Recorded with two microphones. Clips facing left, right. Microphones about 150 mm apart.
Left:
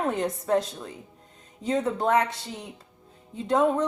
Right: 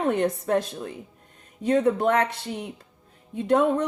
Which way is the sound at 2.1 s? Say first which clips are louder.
Right 1 dB; 60° right (ahead or behind).